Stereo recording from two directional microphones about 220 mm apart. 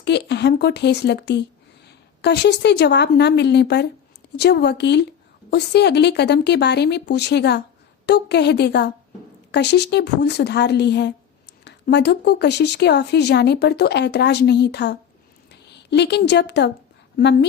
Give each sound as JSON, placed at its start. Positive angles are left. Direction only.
{"t": 0.0, "sound": "a woman's voice", "side_deg": 50}